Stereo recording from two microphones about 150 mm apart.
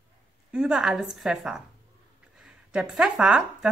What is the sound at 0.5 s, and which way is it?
Speech, 5° right (ahead or behind).